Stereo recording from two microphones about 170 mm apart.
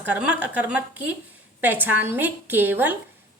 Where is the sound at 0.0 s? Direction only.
10° right (ahead or behind).